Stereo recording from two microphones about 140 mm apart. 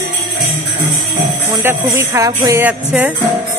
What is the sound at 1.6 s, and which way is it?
Speech, 20° right (ahead or behind).